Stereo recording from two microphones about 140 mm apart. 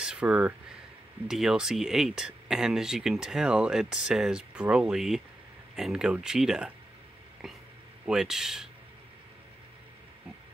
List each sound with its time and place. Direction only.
0.0 s speech: 5° right (ahead or behind)